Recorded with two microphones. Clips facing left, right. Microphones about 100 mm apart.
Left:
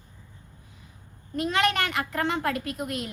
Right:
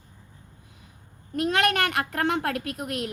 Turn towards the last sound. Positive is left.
turn(degrees=-65)  # may be behind; listen again after turning